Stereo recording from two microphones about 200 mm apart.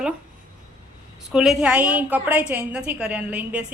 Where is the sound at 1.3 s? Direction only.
5° right (ahead or behind).